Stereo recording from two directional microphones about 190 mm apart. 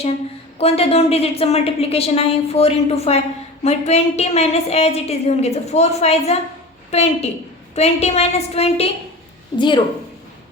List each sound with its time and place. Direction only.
0.6 s a woman's voice: 30° left (ahead or behind)